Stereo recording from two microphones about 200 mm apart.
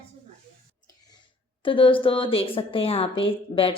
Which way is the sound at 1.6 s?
25° left (ahead or behind).